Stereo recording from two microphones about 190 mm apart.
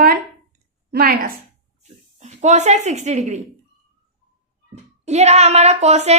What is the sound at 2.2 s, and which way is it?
A woman's voice, 40° right (ahead or behind).